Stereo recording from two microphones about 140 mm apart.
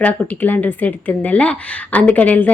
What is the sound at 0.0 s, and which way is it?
A woman's voice, 10° left (ahead or behind).